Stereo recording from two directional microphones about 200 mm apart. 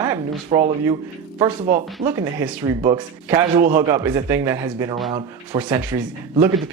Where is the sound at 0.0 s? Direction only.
15° right (ahead or behind).